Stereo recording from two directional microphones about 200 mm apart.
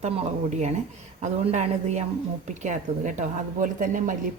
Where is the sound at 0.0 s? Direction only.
35° right (ahead or behind).